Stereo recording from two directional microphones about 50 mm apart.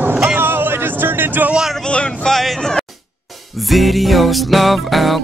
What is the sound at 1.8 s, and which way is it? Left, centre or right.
Speech, centre.